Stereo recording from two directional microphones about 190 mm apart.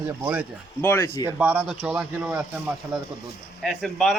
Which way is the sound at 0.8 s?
15° left (ahead or behind).